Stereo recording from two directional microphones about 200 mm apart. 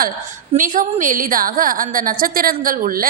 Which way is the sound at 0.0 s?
40° right (ahead or behind).